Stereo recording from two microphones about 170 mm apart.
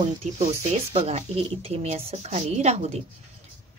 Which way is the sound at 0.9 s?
40° right (ahead or behind).